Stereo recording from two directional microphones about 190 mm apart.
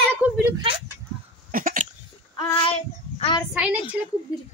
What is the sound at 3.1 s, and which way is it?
Child singing, 30° left (ahead or behind).